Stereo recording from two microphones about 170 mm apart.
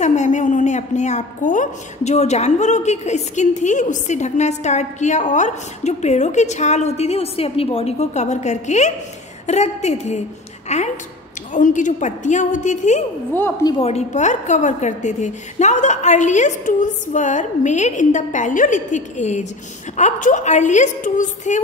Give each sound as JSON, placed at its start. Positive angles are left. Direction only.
{"t": 0.0, "sound": "a woman's voice", "side_deg": 45}
{"t": 13.7, "sound": "a woman's voice", "side_deg": 35}